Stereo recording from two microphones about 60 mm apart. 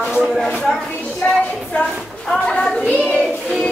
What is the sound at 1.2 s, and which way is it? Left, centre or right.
A woman's voice, left.